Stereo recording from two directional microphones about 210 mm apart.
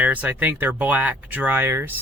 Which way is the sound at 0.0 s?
5° right (ahead or behind).